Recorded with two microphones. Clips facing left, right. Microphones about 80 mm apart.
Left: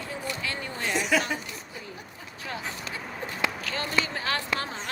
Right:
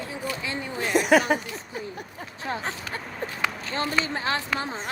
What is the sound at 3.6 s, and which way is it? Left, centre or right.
Speech, right.